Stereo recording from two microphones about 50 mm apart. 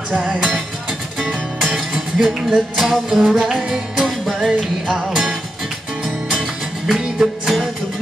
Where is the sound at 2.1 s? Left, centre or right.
Centre.